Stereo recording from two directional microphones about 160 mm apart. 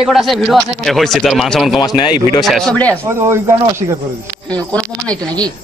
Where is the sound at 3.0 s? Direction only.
15° right (ahead or behind).